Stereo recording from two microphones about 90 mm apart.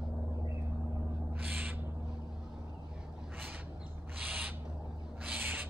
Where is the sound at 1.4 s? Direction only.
20° right (ahead or behind).